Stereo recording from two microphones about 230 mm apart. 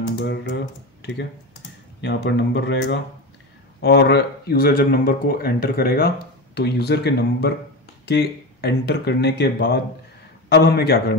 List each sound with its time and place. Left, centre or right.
0.2 s speech: left
2.0 s speech: left